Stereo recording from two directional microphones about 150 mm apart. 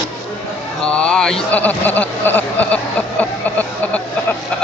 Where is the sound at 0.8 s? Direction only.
5° left (ahead or behind).